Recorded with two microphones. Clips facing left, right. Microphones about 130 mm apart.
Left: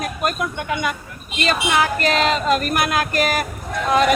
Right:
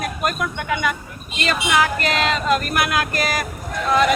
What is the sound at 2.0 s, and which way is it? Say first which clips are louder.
Speech: left 2 dB; 35° left (ahead or behind).